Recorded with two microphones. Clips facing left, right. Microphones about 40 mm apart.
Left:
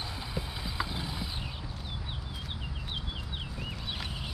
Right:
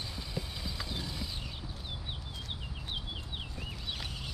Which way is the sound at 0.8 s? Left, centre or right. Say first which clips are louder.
Left 6 dB; left.